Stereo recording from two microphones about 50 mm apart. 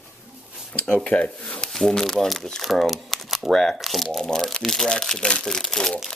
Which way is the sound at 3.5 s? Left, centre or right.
Centre.